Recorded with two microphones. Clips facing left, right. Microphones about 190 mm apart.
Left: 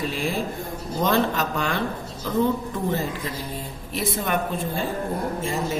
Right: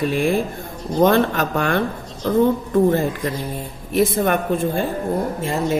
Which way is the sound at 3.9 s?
55° right (ahead or behind).